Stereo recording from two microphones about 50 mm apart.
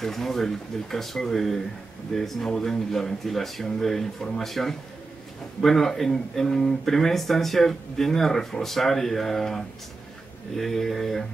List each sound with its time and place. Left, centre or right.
0.0 s speech: centre